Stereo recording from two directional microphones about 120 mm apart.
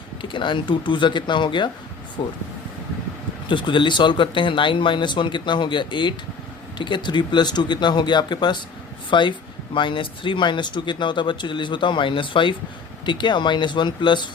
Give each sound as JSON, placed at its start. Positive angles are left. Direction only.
{"t": 0.2, "sound": "speech", "side_deg": 45}
{"t": 3.5, "sound": "speech", "side_deg": 40}